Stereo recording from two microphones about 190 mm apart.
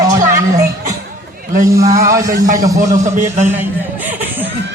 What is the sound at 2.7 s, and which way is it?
Speech, 15° right (ahead or behind).